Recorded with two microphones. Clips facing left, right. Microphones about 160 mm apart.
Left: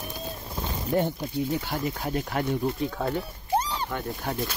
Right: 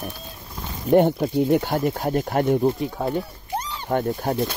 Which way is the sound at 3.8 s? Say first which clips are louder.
Right 8 dB; 45° right (ahead or behind).